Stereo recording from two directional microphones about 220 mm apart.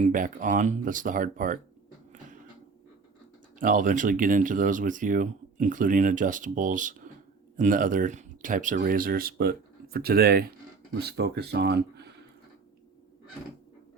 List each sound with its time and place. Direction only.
0.0 s speech: 35° right (ahead or behind)
3.6 s speech: 35° right (ahead or behind)